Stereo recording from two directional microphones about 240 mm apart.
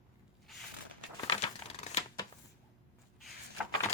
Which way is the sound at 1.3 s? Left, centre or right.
Left.